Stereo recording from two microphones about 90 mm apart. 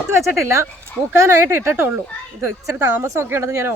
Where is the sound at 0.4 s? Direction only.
30° right (ahead or behind).